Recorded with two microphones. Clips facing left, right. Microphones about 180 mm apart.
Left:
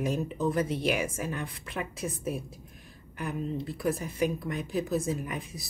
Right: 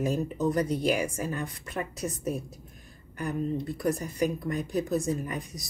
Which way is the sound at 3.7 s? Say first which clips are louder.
Even; 5° left (ahead or behind).